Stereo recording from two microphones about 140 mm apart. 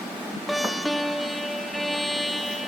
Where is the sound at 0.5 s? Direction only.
Centre (ahead or behind).